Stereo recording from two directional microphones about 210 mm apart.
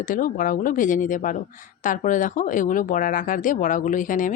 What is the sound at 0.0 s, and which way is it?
Speech, 40° left (ahead or behind).